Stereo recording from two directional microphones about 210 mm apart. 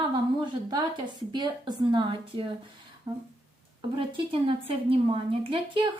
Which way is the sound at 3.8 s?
25° right (ahead or behind).